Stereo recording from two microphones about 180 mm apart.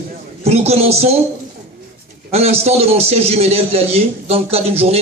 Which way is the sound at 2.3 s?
35° right (ahead or behind).